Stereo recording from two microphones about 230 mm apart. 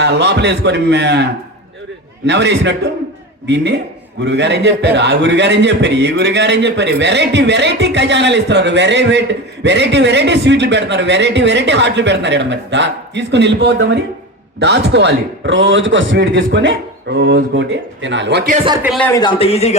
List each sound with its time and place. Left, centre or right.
0.0 s a man's voice: right
18.5 s a man's voice: right
18.8 s a man's voice: centre
19.0 s speech: centre